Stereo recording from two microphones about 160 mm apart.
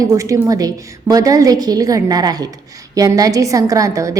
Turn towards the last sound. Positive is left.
turn(degrees=-20)  # may be behind; listen again after turning